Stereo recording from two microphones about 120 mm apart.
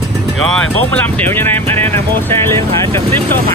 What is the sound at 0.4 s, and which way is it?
Speech, 5° left (ahead or behind).